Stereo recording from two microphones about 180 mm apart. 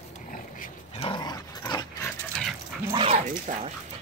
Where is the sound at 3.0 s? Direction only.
40° right (ahead or behind).